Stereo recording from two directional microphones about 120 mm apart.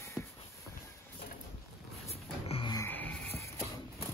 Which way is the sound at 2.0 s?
55° left (ahead or behind).